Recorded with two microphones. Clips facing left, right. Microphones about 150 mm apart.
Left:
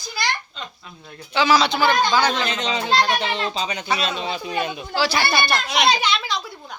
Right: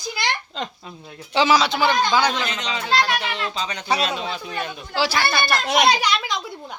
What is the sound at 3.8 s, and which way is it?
Speech, 40° right (ahead or behind).